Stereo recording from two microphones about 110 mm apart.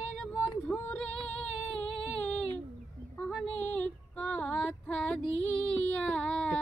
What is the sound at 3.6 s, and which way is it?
Child singing, 10° left (ahead or behind).